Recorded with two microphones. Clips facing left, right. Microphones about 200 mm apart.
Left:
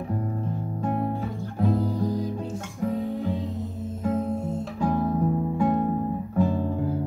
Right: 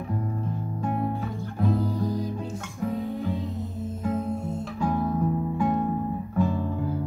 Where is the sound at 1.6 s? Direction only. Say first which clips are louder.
Left 1 dB; 35° left (ahead or behind).